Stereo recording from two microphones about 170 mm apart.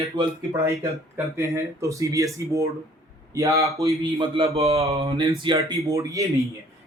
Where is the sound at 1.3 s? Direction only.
15° right (ahead or behind).